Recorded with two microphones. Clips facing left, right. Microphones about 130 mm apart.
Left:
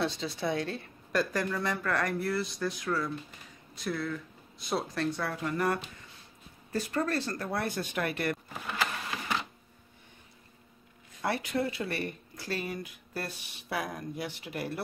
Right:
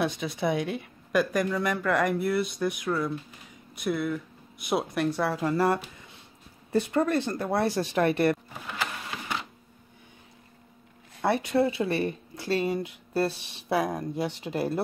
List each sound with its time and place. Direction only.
0.0 s speech: 15° right (ahead or behind)
5.2 s speech: 30° right (ahead or behind)
11.2 s speech: 25° right (ahead or behind)